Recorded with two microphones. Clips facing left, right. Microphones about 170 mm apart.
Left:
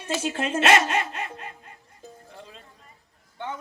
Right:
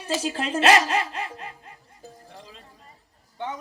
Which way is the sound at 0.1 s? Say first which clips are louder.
Even; 35° right (ahead or behind).